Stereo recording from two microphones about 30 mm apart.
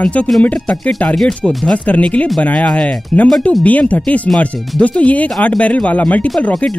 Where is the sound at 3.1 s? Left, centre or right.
Left.